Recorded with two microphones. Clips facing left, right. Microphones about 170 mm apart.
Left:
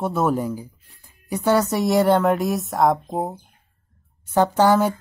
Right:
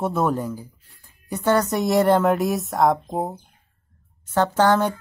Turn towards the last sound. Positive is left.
turn(degrees=10)  # may be behind; listen again after turning